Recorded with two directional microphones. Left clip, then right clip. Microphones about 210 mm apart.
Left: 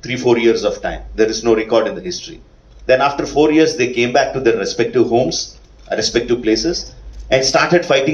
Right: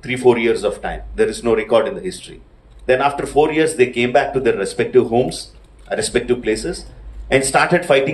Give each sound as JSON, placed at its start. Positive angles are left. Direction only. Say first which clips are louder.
{"t": 0.0, "sound": "speech", "louder": "left 1 dB", "side_deg": -55}